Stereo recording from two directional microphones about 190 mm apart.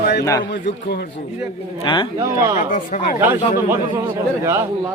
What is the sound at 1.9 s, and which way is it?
Speech, 25° left (ahead or behind).